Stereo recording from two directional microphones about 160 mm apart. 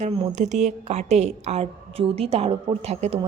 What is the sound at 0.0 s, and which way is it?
A woman's voice, 45° right (ahead or behind).